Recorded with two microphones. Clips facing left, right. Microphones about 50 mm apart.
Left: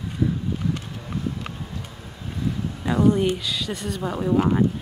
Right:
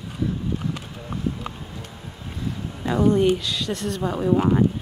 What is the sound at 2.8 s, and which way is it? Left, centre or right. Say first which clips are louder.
Speech: right 1 dB; centre.